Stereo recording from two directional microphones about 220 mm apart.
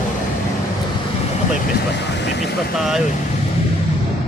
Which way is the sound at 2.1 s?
50° left (ahead or behind).